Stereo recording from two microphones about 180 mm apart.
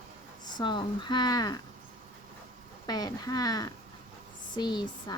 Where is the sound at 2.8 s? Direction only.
20° left (ahead or behind).